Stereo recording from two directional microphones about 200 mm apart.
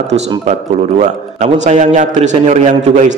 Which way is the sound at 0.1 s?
35° right (ahead or behind).